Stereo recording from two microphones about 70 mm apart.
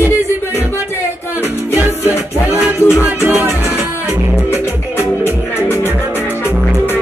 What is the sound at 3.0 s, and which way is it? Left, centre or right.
Music, right.